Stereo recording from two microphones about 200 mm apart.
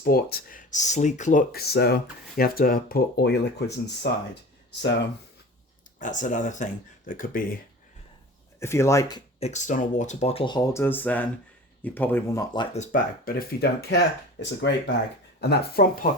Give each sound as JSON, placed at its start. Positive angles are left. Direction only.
{"t": 0.0, "sound": "speech", "side_deg": 50}
{"t": 6.0, "sound": "speech", "side_deg": 40}
{"t": 8.5, "sound": "speech", "side_deg": 15}
{"t": 9.4, "sound": "speech", "side_deg": 35}
{"t": 12.7, "sound": "speech", "side_deg": 40}